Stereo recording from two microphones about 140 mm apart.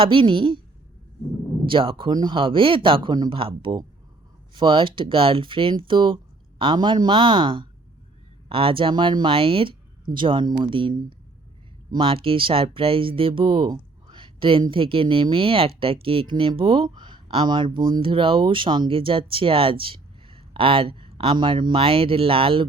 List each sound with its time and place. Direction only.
0.0 s speech: 40° right (ahead or behind)
1.6 s speech: 40° right (ahead or behind)